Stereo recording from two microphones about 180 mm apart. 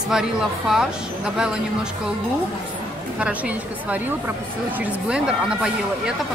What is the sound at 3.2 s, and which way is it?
A woman's voice, 10° right (ahead or behind).